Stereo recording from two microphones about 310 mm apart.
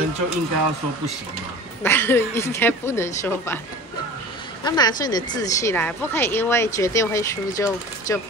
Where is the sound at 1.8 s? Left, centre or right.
Centre.